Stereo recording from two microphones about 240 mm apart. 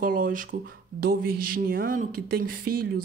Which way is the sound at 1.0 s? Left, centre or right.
Right.